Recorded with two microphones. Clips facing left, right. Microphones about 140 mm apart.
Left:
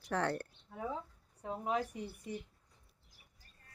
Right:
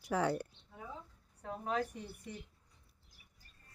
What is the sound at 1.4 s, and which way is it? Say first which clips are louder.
Speech: left 1 dB; 15° left (ahead or behind).